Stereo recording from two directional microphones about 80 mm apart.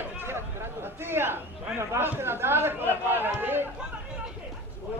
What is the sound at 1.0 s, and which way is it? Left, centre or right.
A man's voice, right.